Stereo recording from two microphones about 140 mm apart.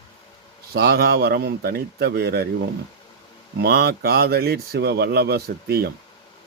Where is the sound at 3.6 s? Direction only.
90° right.